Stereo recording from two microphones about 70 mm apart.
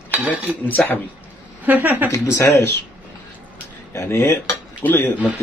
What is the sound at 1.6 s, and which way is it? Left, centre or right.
Speech, right.